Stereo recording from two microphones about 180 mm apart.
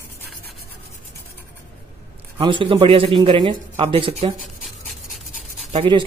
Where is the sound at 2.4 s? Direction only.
25° right (ahead or behind).